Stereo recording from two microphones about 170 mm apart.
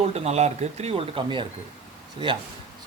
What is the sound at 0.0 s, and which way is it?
A man's voice, 40° right (ahead or behind).